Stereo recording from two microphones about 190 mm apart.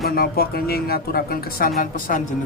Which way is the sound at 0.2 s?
55° left (ahead or behind).